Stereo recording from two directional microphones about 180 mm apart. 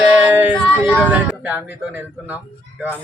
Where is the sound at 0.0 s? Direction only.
5° right (ahead or behind).